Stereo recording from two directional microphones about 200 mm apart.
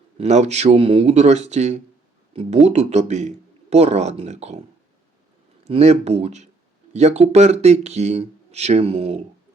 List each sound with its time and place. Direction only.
0.2 s speech: 35° right (ahead or behind)
5.6 s speech: 30° right (ahead or behind)